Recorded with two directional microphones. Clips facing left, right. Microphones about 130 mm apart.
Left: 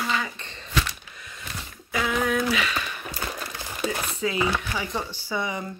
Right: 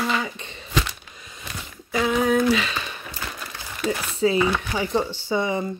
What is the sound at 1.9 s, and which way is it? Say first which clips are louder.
Speech: right 4 dB; 30° right (ahead or behind).